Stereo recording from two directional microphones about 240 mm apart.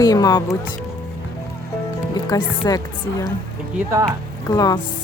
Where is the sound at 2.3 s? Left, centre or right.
Centre.